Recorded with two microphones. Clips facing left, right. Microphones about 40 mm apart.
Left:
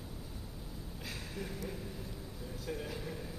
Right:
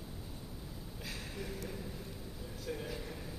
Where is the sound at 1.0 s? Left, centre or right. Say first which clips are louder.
Left 1 dB; centre.